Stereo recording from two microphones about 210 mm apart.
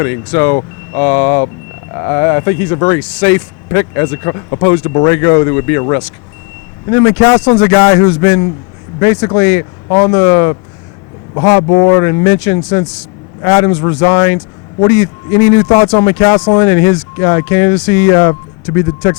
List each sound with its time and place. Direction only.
0.0 s speech: 15° left (ahead or behind)
6.9 s speech: 10° left (ahead or behind)
11.9 s speech: 15° left (ahead or behind)